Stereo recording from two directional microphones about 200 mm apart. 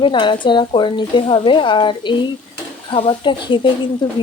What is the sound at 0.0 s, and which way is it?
A woman's voice, 25° left (ahead or behind).